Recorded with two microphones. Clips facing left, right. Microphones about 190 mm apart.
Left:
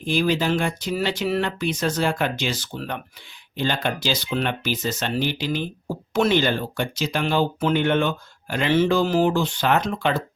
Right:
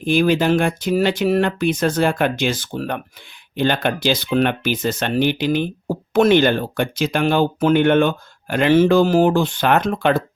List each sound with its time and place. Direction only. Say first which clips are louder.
0.0 s speech: right 5 dB; 55° right (ahead or behind)